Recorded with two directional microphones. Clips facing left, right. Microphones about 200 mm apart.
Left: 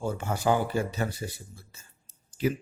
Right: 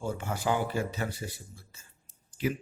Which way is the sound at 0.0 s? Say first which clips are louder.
Left 4 dB; 40° left (ahead or behind).